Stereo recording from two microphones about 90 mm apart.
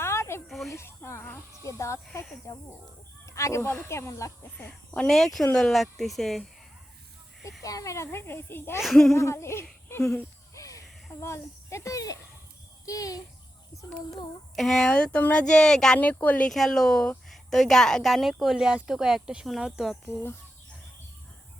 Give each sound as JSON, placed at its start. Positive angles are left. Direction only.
{"t": 0.0, "sound": "a sound", "side_deg": 30}
{"t": 0.4, "sound": "a sound", "side_deg": 0}
{"t": 0.7, "sound": "a sound", "side_deg": 30}
{"t": 1.6, "sound": "speech", "side_deg": 35}
{"t": 4.9, "sound": "speech", "side_deg": 5}
{"t": 7.6, "sound": "speech", "side_deg": 40}
{"t": 8.8, "sound": "speech", "side_deg": 5}
{"t": 9.1, "sound": "speech", "side_deg": 30}
{"t": 10.5, "sound": "a sound", "side_deg": 40}
{"t": 11.1, "sound": "a child's voice", "side_deg": 30}
{"t": 14.5, "sound": "speech", "side_deg": 5}
{"t": 16.0, "sound": "speech", "side_deg": 15}
{"t": 16.5, "sound": "speech", "side_deg": 5}